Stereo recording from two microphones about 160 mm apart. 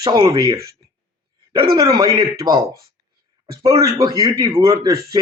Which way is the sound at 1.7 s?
25° right (ahead or behind).